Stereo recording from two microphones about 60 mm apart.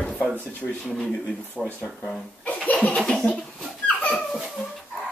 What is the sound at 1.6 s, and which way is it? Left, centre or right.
Speech, centre.